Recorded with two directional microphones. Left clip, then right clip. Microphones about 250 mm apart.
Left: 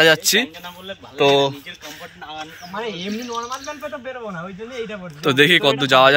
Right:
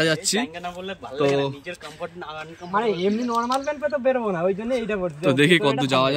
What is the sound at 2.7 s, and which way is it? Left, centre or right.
Speech, right.